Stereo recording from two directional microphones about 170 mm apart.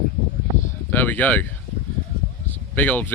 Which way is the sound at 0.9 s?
10° left (ahead or behind).